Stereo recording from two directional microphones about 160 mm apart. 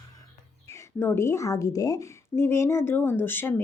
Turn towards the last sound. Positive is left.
turn(degrees=15)  # may be behind; listen again after turning